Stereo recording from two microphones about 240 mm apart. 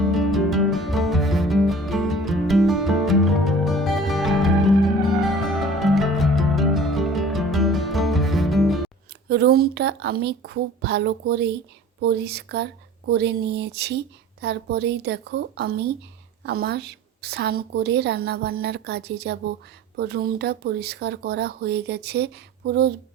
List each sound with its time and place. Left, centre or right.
0.0 s music: centre
9.3 s a woman's voice: right